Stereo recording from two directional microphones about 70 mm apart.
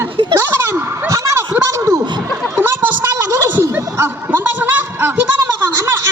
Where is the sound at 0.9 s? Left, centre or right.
Right.